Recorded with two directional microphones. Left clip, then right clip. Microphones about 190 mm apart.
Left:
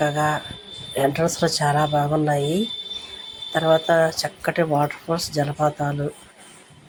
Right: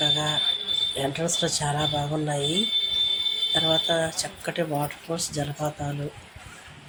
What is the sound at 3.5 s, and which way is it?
Speech, 15° left (ahead or behind).